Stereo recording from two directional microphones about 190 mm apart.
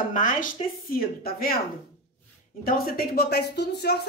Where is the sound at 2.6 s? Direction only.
50° left (ahead or behind).